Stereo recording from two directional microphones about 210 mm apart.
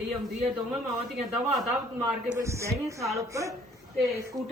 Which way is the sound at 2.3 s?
15° right (ahead or behind).